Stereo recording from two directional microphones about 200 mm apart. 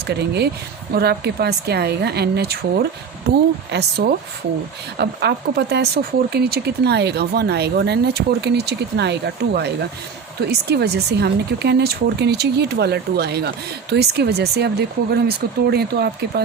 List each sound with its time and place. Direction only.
0.1 s speech: 55° right (ahead or behind)